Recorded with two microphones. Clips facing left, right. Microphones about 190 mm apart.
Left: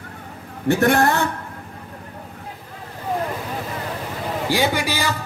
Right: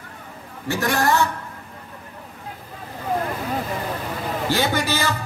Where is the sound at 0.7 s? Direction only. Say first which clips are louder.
Left 4 dB; 55° left (ahead or behind).